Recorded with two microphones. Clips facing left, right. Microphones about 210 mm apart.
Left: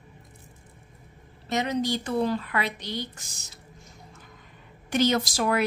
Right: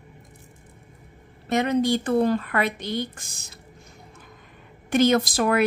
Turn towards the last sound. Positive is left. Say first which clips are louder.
# right 4 dB
turn(degrees=-55)  # may be behind; listen again after turning